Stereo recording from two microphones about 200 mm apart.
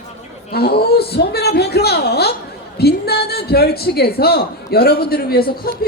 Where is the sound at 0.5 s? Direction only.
50° left (ahead or behind).